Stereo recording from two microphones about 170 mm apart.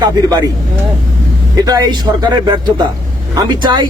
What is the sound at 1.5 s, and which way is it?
Speech, 20° right (ahead or behind).